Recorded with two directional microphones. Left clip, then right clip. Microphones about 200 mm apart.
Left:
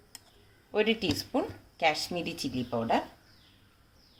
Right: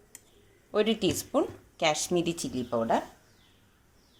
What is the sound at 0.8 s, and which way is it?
Speech, 25° right (ahead or behind).